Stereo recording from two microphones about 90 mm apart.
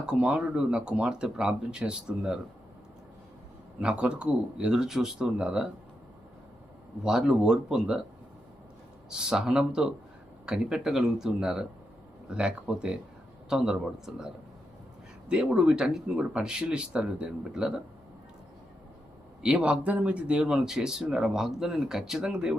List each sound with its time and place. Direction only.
0.0 s speech: 10° right (ahead or behind)
3.8 s speech: 10° right (ahead or behind)
7.0 s speech: 5° right (ahead or behind)
9.0 s speech: 10° right (ahead or behind)
15.3 s speech: 10° right (ahead or behind)
19.4 s speech: 10° right (ahead or behind)